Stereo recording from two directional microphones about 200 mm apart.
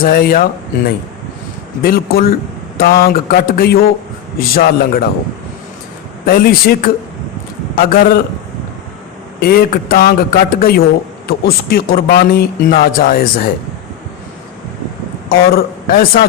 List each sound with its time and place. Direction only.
0.0 s speech: 45° left (ahead or behind)
1.8 s speech: 50° left (ahead or behind)
6.2 s speech: 45° left (ahead or behind)
9.4 s speech: 50° left (ahead or behind)
15.3 s a man's voice: 45° left (ahead or behind)